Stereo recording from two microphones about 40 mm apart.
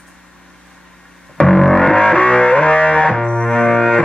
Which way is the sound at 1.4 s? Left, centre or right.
Centre.